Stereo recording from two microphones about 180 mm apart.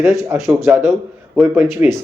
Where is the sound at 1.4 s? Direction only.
10° right (ahead or behind).